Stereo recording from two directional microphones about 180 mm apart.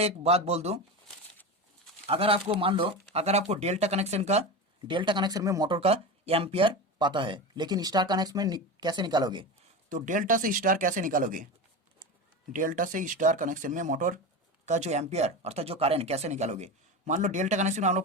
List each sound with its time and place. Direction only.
0.0 s speech: 35° right (ahead or behind)
2.0 s speech: 30° right (ahead or behind)
4.9 s speech: 25° right (ahead or behind)
9.9 s speech: 45° right (ahead or behind)
12.5 s speech: 50° right (ahead or behind)